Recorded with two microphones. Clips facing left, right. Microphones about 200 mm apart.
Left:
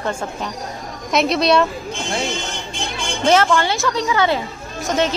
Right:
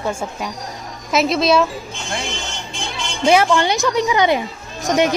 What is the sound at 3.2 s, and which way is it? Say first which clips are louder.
Speech: right 1 dB; 15° right (ahead or behind).